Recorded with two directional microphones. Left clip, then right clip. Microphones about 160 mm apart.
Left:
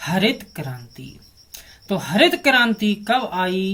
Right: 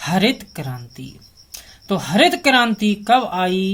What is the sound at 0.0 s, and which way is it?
Speech, 25° right (ahead or behind).